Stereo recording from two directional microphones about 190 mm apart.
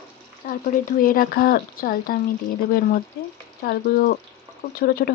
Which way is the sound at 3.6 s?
50° left (ahead or behind).